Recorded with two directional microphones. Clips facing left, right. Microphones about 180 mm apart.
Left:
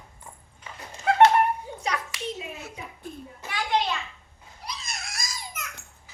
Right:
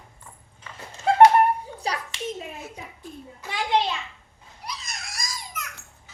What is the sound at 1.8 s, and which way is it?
Hands, 35° right (ahead or behind).